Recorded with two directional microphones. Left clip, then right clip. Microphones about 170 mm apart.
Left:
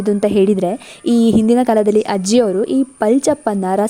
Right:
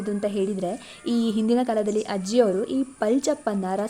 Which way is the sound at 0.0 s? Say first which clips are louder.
Left 12 dB; 55° left (ahead or behind).